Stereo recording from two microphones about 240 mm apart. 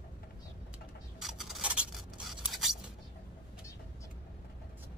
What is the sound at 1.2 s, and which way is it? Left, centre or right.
Scissors, centre.